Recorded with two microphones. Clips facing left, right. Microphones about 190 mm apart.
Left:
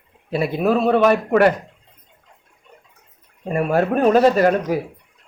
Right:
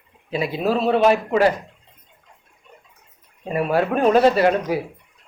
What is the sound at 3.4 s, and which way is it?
Speech, 50° left (ahead or behind).